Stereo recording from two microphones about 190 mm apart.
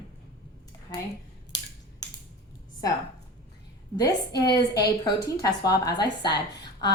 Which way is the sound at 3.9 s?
20° left (ahead or behind).